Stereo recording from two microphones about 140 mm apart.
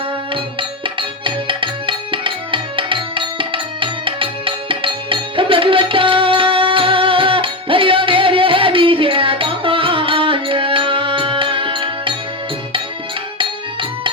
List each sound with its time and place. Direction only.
0.9 s music: 35° right (ahead or behind)